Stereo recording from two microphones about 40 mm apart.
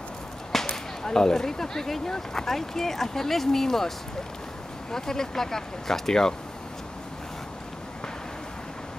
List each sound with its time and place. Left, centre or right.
0.5 s a sound: centre
1.0 s speech: centre
4.9 s speech: centre